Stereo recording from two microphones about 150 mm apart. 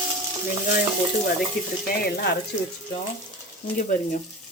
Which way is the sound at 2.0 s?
90° left.